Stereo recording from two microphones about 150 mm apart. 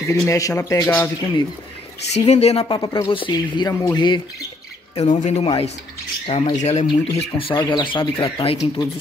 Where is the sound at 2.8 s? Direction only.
30° left (ahead or behind).